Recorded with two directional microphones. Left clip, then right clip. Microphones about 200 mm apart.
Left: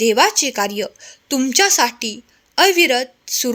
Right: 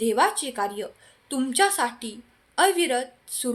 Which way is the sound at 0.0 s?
45° left (ahead or behind).